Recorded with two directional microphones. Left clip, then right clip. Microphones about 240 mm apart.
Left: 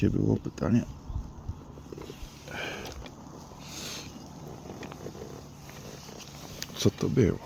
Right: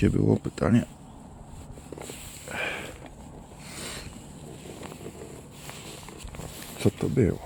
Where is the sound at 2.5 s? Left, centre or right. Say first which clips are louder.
Right 5 dB; centre.